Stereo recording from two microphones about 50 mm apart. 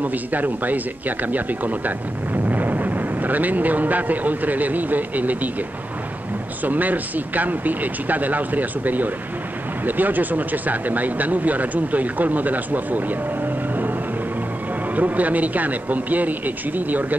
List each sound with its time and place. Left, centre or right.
0.0 s speech: right
6.6 s speech: right
15.0 s speech: right